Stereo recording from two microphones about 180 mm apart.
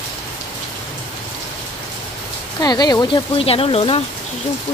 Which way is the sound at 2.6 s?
20° left (ahead or behind).